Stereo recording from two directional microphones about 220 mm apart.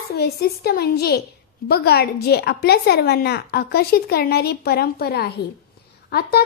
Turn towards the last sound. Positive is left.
turn(degrees=50)  # may be behind; listen again after turning